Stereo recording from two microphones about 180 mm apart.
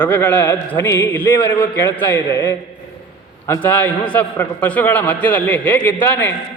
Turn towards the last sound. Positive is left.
turn(degrees=10)  # may be behind; listen again after turning